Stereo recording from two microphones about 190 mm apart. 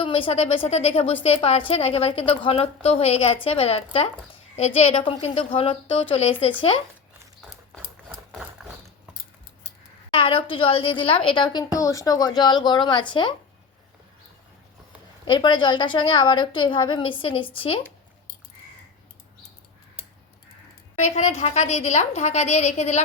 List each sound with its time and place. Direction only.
0.0 s a woman's voice: 30° left (ahead or behind)
8.3 s a sound: centre (ahead or behind)
10.1 s a sound: 30° left (ahead or behind)
10.5 s a woman's voice: 30° left (ahead or behind)
15.2 s a woman's voice: 25° left (ahead or behind)
21.0 s a woman's voice: 35° left (ahead or behind)